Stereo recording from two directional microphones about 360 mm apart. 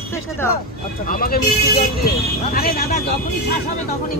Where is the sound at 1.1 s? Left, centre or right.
Left.